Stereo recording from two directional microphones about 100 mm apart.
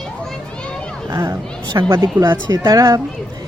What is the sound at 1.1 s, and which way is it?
Speech, 40° right (ahead or behind).